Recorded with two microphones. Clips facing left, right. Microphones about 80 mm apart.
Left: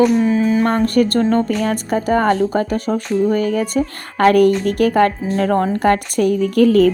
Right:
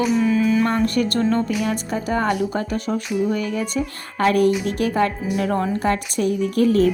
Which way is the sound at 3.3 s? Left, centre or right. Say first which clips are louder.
Left 6 dB; left.